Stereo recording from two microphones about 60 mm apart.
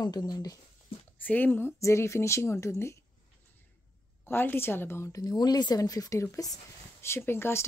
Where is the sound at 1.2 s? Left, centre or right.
Left.